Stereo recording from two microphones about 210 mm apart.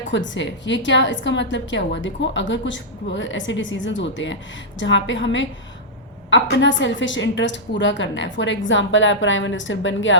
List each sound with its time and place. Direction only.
0.1 s a woman's voice: 60° left (ahead or behind)